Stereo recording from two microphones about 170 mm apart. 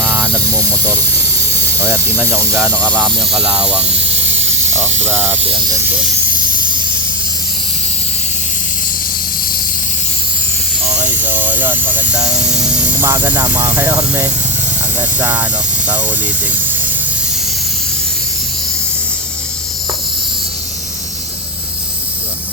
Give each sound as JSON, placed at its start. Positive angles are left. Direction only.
{"t": 0.1, "sound": "snake", "side_deg": -20}
{"t": 1.8, "sound": "speech", "side_deg": -20}
{"t": 2.7, "sound": "speech", "side_deg": 5}
{"t": 3.3, "sound": "speech", "side_deg": -5}
{"t": 5.0, "sound": "speech", "side_deg": -10}
{"t": 11.3, "sound": "speech", "side_deg": -10}